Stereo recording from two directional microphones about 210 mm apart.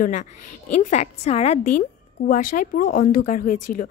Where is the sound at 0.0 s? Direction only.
40° left (ahead or behind).